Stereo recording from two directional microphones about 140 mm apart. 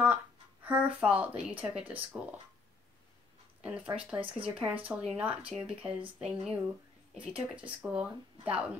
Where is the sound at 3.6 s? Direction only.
5° right (ahead or behind).